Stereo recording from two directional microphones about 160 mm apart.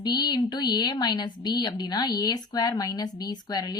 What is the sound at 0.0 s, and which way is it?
Speech, 25° left (ahead or behind).